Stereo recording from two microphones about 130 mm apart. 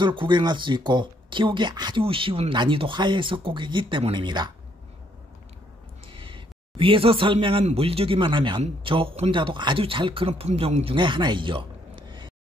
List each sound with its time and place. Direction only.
0.0 s speech: 40° right (ahead or behind)
6.1 s a sound: 40° right (ahead or behind)
7.6 s speech: 50° right (ahead or behind)